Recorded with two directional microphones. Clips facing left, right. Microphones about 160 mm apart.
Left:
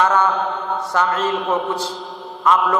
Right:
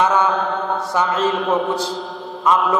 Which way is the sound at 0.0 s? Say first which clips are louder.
Even; 10° right (ahead or behind).